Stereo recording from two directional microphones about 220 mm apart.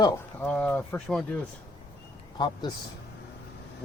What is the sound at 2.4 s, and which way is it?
Speech, 20° left (ahead or behind).